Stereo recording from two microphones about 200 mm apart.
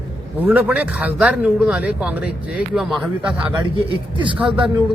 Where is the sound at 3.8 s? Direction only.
25° right (ahead or behind).